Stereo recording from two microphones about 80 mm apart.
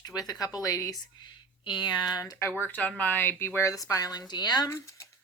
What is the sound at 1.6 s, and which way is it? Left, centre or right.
Speech, left.